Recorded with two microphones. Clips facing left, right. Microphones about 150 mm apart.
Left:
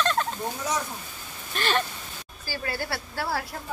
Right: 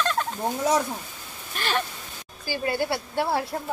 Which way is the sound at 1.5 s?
10° right (ahead or behind).